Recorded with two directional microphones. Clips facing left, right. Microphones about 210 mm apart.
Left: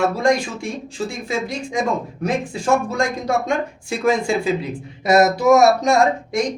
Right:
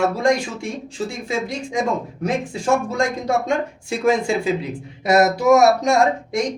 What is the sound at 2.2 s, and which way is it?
Speech, 20° right (ahead or behind).